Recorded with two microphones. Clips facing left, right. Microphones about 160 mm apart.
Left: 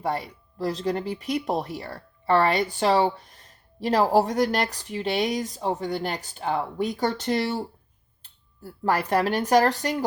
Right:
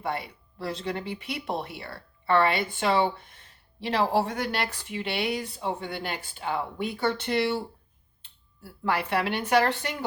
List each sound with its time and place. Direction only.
0.0 s speech: 40° left (ahead or behind)